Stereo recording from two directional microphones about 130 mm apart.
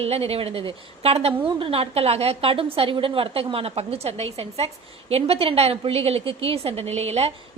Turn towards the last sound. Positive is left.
turn(degrees=-55)  # may be behind; listen again after turning